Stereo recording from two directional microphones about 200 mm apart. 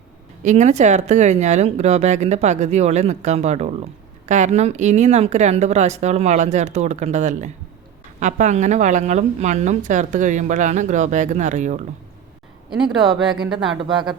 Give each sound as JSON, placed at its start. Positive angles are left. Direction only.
{"t": 0.4, "sound": "a woman's voice", "side_deg": -35}
{"t": 12.7, "sound": "speech", "side_deg": 0}